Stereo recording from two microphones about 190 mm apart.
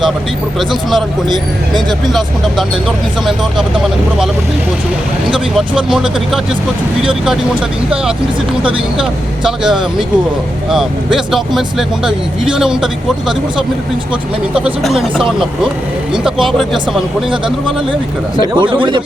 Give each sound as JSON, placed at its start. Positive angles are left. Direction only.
{"t": 0.7, "sound": "speech", "side_deg": 0}
{"t": 5.5, "sound": "speech", "side_deg": -5}
{"t": 8.6, "sound": "speech", "side_deg": -5}
{"t": 14.5, "sound": "speech", "side_deg": -5}
{"t": 16.2, "sound": "speech", "side_deg": 0}
{"t": 18.3, "sound": "speech", "side_deg": -25}